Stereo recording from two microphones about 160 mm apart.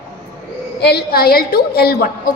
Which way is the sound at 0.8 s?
80° left.